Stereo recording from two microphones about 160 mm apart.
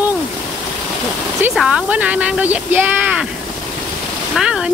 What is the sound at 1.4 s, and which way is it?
Speech, 5° right (ahead or behind).